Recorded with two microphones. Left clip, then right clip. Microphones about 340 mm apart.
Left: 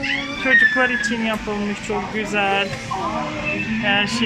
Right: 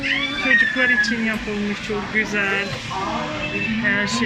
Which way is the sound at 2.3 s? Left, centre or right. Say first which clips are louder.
Left 5 dB; centre.